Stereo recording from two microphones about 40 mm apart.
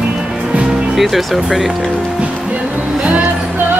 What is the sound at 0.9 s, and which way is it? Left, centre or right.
Speech, centre.